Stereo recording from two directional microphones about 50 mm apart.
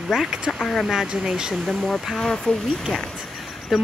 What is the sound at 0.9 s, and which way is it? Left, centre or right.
Speech, centre.